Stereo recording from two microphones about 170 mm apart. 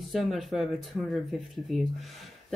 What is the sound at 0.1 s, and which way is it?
A woman's voice, centre (ahead or behind).